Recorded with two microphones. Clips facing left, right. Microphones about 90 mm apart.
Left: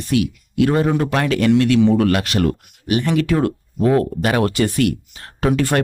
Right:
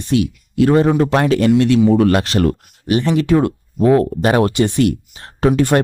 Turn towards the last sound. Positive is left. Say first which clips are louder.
# right 4 dB
turn(degrees=-25)  # may be behind; listen again after turning